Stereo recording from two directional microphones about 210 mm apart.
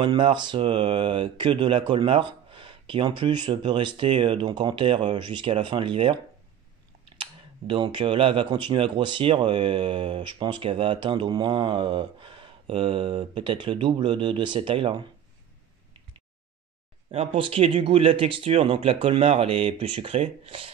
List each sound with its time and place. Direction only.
0.0 s speech: 25° right (ahead or behind)
7.2 s speech: 25° right (ahead or behind)
17.1 s speech: 25° right (ahead or behind)